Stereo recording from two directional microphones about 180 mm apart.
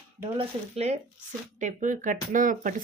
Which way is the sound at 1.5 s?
45° right (ahead or behind).